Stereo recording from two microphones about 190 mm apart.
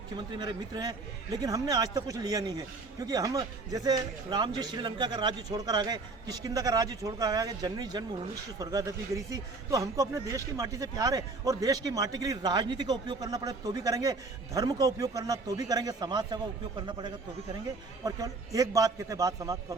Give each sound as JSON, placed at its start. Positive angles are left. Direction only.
{"t": 0.3, "sound": "speech", "side_deg": -20}